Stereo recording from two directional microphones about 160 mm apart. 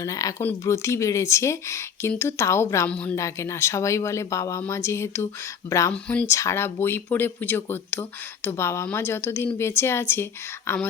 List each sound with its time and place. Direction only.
0.0 s speech: 20° left (ahead or behind)
3.2 s speech: 20° left (ahead or behind)